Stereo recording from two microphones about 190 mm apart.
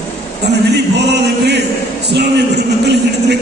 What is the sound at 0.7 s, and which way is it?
Speech, 65° right (ahead or behind).